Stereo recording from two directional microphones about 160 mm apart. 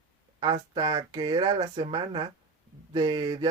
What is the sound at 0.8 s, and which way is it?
Speech, 25° right (ahead or behind).